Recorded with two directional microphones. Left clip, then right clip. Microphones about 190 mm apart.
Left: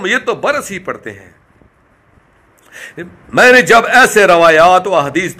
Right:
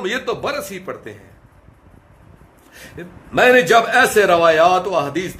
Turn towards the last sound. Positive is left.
turn(degrees=30)  # may be behind; listen again after turning